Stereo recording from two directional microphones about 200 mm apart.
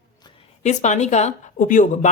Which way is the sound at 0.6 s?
35° left (ahead or behind).